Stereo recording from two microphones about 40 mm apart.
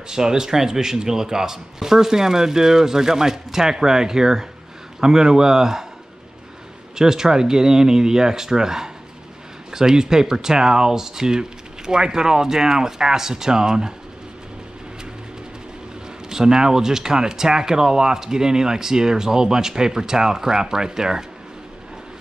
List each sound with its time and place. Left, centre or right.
0.1 s speech: centre
7.0 s speech: centre
16.3 s speech: centre